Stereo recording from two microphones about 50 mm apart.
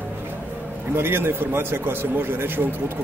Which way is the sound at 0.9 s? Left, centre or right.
Right.